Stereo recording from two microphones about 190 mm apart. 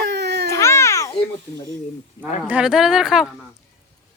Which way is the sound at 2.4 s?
5° right (ahead or behind).